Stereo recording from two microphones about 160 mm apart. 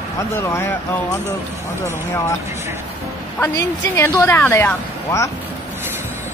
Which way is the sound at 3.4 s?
15° left (ahead or behind).